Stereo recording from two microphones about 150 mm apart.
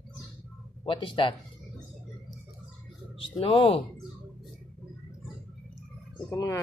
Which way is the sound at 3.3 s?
35° left (ahead or behind).